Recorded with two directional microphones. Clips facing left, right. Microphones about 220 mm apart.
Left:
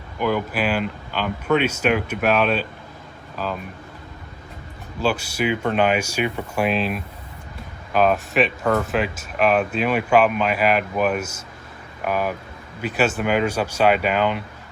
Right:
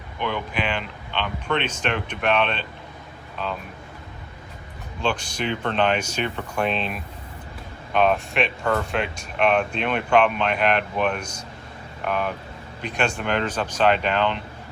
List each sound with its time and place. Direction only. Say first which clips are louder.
0.2 s speech: left 5 dB; 5° left (ahead or behind)
5.0 s speech: left 4 dB; 5° left (ahead or behind)